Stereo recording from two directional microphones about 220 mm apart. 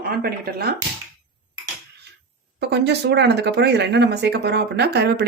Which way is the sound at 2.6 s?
50° right (ahead or behind).